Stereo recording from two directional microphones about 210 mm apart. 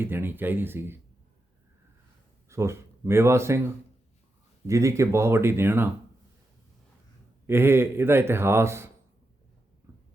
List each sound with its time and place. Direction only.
0.0 s a man's voice: 10° right (ahead or behind)
2.5 s speech: 15° right (ahead or behind)
4.6 s a man's voice: 15° right (ahead or behind)
7.4 s a man's voice: 10° right (ahead or behind)